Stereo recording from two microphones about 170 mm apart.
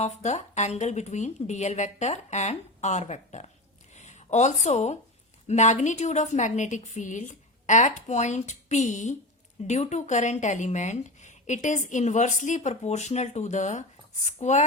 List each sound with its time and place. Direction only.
0.0 s speech: 40° left (ahead or behind)